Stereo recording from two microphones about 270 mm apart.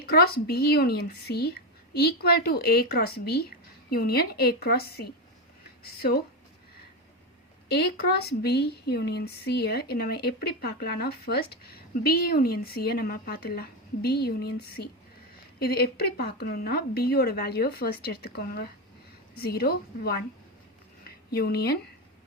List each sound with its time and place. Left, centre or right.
0.0 s speech: left
7.7 s speech: left
21.0 s a sound: left